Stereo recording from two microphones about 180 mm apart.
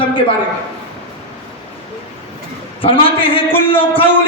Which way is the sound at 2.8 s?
30° left (ahead or behind).